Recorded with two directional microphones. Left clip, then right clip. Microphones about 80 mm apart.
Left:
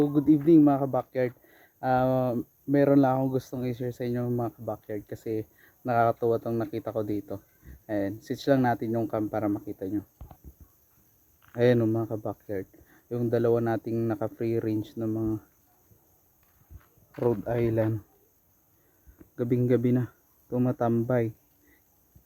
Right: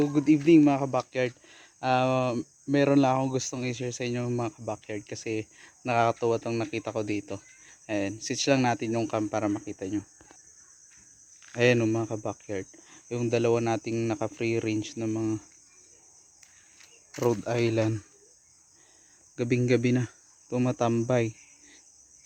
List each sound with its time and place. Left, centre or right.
0.0 s speech: centre
0.8 s speech: centre
1.5 s speech: centre
11.6 s speech: centre
12.3 s cricket: centre
14.1 s speech: centre
17.2 s speech: centre
19.4 s speech: centre